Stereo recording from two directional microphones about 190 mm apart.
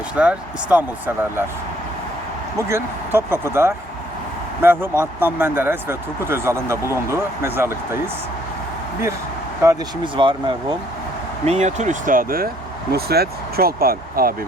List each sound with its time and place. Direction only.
0.2 s speech: 5° right (ahead or behind)
2.6 s speech: 15° right (ahead or behind)
9.6 s speech: 25° right (ahead or behind)
11.4 s speech: 35° right (ahead or behind)